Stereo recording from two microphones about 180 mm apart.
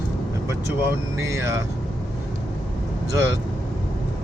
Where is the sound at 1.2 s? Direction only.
15° right (ahead or behind).